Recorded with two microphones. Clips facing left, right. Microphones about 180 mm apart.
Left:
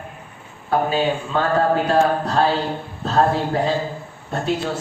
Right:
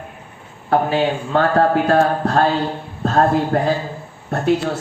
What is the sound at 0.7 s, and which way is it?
A woman's voice, 65° right (ahead or behind).